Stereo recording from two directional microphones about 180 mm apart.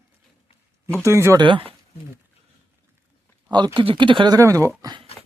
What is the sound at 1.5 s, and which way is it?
Speech, 30° right (ahead or behind).